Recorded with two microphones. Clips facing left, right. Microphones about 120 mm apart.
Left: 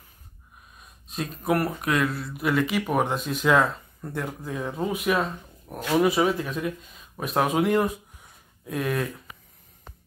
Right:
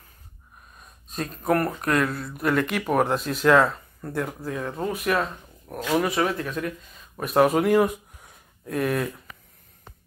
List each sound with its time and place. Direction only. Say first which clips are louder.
0.7 s speech: right 1 dB; 5° left (ahead or behind)